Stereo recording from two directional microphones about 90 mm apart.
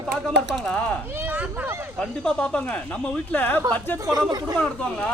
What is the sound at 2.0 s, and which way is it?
Speech, 10° left (ahead or behind).